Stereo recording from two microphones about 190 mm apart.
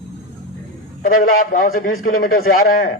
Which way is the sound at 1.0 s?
45° left (ahead or behind).